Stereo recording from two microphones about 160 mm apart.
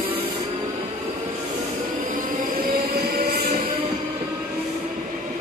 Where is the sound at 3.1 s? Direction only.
75° right (ahead or behind).